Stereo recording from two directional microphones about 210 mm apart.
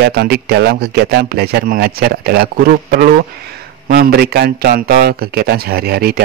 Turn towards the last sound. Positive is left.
turn(degrees=-45)  # may be behind; listen again after turning